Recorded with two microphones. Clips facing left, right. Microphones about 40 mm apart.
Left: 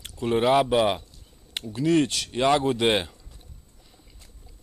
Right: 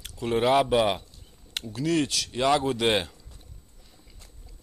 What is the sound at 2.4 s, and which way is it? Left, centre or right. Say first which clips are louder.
Speech: left 2 dB; centre.